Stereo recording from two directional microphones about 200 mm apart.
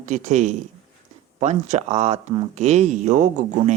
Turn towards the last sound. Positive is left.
turn(degrees=-40)  # may be behind; listen again after turning